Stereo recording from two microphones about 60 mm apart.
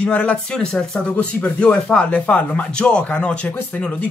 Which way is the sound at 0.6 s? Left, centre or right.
Centre.